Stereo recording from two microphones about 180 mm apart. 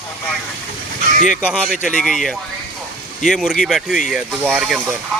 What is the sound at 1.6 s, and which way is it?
A man's voice, centre (ahead or behind).